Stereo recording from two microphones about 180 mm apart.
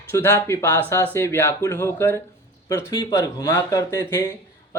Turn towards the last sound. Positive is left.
turn(degrees=15)  # may be behind; listen again after turning